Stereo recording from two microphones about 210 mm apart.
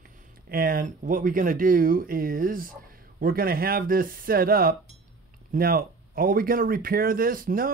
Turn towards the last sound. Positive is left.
turn(degrees=-40)  # may be behind; listen again after turning